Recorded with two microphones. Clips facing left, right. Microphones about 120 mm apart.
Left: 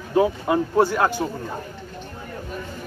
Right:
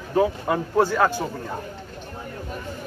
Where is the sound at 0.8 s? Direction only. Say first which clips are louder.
Right 1 dB; 15° left (ahead or behind).